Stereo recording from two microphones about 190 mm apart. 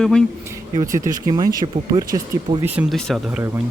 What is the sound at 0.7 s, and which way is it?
Speech, 20° right (ahead or behind).